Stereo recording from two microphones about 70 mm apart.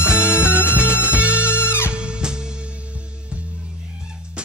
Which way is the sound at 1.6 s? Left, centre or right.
Left.